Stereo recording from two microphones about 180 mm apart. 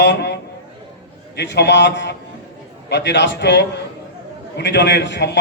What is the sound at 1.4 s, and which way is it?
A man's voice, 70° left (ahead or behind).